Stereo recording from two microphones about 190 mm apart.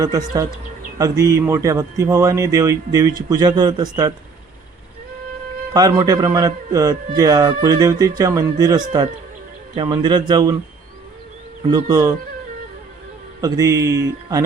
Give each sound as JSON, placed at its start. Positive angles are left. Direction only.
{"t": 0.0, "sound": "speech", "side_deg": -20}
{"t": 5.7, "sound": "speech", "side_deg": -20}
{"t": 11.7, "sound": "speech", "side_deg": -20}
{"t": 13.4, "sound": "speech", "side_deg": -20}